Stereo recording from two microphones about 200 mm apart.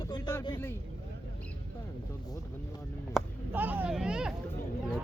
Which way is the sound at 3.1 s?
10° right (ahead or behind).